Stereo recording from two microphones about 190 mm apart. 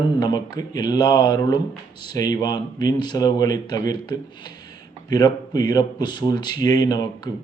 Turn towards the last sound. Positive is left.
turn(degrees=20)  # may be behind; listen again after turning